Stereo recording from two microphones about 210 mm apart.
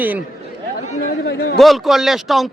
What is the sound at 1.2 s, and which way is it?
Speech, 50° left (ahead or behind).